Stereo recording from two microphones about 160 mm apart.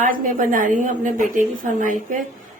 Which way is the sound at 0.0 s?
55° right (ahead or behind).